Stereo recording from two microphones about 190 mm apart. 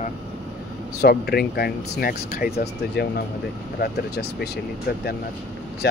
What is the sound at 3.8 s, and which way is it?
Speech, 60° left (ahead or behind).